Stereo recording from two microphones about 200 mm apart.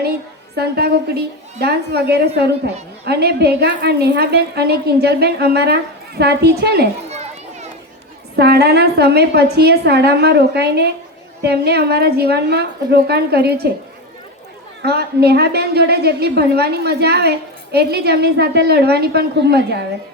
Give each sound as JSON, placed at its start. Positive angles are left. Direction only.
{"t": 0.5, "sound": "a woman's voice", "side_deg": -55}
{"t": 7.1, "sound": "children playing", "side_deg": -35}
{"t": 8.4, "sound": "a woman's voice", "side_deg": -55}
{"t": 14.8, "sound": "a woman's voice", "side_deg": -55}